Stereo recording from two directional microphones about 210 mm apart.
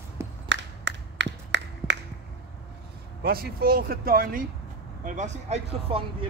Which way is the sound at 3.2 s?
45° right (ahead or behind).